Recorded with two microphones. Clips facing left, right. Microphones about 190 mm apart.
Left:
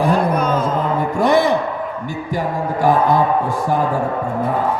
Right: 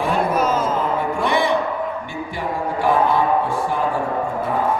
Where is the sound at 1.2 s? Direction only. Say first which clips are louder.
Left 7 dB; 40° left (ahead or behind).